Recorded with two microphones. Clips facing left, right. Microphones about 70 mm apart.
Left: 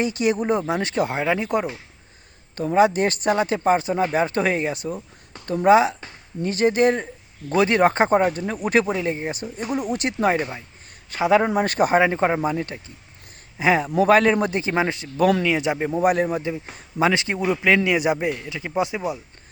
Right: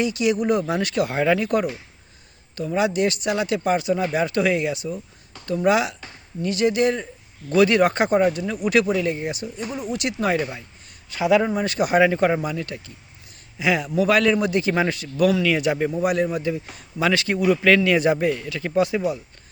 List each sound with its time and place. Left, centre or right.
0.0 s a man's voice: left
2.6 s speech: left
7.5 s speech: left
9.6 s speech: left
10.0 s speech: left
11.5 s a man's voice: left
15.9 s speech: left
16.4 s a man's voice: left